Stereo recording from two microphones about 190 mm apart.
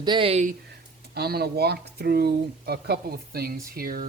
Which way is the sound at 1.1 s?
55° right (ahead or behind).